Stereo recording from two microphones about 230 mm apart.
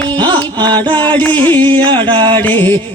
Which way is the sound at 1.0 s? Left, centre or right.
Centre.